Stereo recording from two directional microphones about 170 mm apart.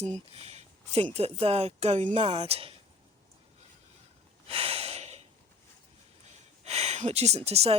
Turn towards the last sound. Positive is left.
turn(degrees=-35)  # may be behind; listen again after turning